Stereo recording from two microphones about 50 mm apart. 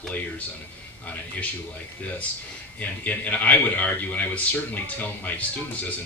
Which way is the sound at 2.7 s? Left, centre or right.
Left.